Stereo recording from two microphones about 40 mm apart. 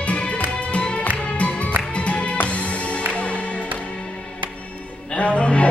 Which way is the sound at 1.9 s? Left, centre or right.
Left.